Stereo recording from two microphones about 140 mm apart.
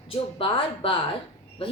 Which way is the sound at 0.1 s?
40° left (ahead or behind).